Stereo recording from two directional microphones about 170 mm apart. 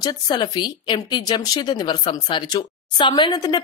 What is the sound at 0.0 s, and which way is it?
Speech, 25° left (ahead or behind).